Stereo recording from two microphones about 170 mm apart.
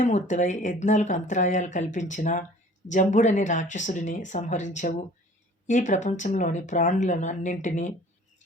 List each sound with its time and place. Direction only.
0.0 s speech: 45° left (ahead or behind)